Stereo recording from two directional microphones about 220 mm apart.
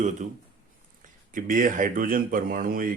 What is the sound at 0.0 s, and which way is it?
Speech, 35° right (ahead or behind).